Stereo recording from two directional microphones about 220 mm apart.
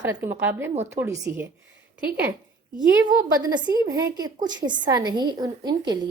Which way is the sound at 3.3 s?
20° right (ahead or behind).